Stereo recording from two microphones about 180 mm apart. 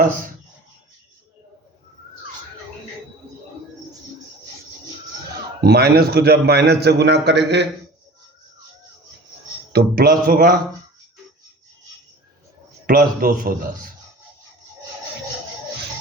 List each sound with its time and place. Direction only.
5.6 s a man's voice: 60° right (ahead or behind)
9.7 s a man's voice: 55° right (ahead or behind)
12.8 s a man's voice: 55° right (ahead or behind)